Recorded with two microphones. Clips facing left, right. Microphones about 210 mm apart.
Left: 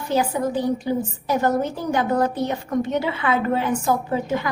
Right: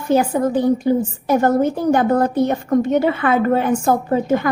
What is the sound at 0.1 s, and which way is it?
A woman's voice, 50° right (ahead or behind).